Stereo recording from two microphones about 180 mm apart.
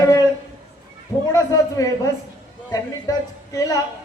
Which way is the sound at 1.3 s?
20° left (ahead or behind).